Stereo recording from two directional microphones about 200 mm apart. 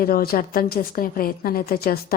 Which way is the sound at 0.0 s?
50° left (ahead or behind).